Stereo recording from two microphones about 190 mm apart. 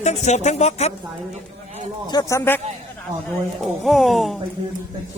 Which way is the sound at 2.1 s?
20° left (ahead or behind).